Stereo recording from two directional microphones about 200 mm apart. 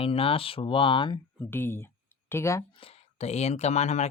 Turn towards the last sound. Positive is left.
turn(degrees=35)  # may be behind; listen again after turning